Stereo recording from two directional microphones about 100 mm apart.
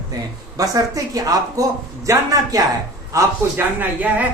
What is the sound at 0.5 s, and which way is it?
Speech, 35° right (ahead or behind).